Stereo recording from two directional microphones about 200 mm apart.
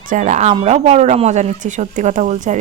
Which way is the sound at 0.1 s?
40° right (ahead or behind).